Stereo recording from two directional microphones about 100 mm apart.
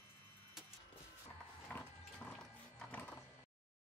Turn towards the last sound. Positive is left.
turn(degrees=10)  # may be behind; listen again after turning